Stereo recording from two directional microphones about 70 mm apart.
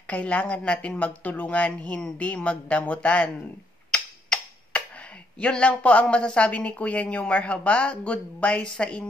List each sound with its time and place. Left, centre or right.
0.0 s a woman's voice: centre